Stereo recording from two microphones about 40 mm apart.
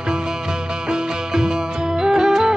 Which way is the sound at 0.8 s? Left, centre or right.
Centre.